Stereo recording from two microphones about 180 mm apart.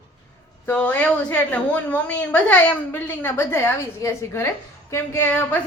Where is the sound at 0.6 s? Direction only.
5° left (ahead or behind).